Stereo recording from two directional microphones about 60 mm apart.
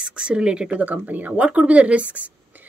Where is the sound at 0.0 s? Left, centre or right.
Centre.